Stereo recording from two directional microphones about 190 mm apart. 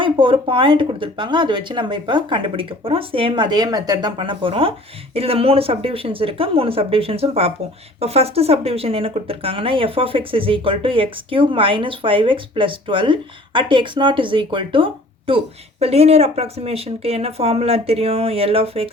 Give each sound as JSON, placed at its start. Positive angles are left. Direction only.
{"t": 0.0, "sound": "speech", "side_deg": -25}